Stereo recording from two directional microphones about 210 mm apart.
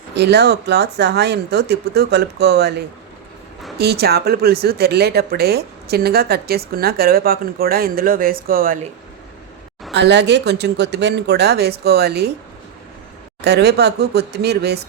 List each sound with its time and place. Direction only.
0.1 s speech: 55° right (ahead or behind)
9.9 s speech: 55° right (ahead or behind)
13.4 s speech: 50° right (ahead or behind)